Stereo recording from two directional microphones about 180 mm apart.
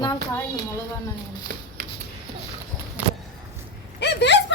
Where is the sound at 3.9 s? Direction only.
75° left (ahead or behind).